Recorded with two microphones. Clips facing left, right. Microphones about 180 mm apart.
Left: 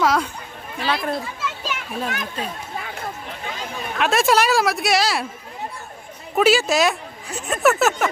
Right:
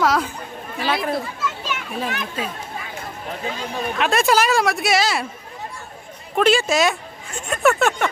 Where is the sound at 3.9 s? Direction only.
Centre (ahead or behind).